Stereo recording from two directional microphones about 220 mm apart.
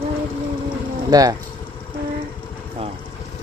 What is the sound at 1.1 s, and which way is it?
Speech, 15° right (ahead or behind).